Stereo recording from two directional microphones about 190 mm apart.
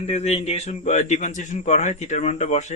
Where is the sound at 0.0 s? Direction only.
35° left (ahead or behind).